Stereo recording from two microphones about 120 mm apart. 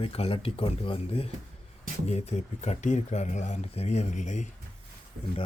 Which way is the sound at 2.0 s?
65° left (ahead or behind).